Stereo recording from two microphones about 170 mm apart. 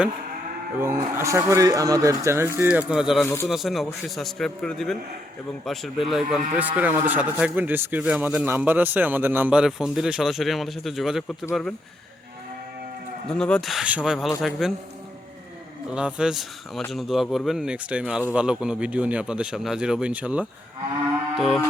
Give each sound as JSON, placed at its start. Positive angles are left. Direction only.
{"t": 0.8, "sound": "speech", "side_deg": -15}
{"t": 13.2, "sound": "speech", "side_deg": 5}
{"t": 15.9, "sound": "speech", "side_deg": -5}
{"t": 21.3, "sound": "moo", "side_deg": 0}